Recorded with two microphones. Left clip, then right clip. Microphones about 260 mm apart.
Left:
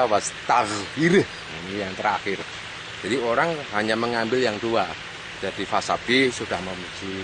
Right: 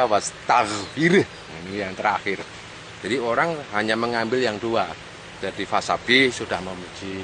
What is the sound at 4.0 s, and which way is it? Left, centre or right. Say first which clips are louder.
Speech: even; centre.